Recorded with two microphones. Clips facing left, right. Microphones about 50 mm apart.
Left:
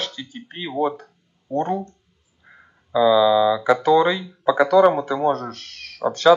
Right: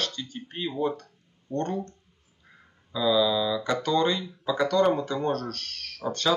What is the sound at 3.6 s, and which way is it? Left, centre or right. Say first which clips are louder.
Speech: left 8 dB; centre.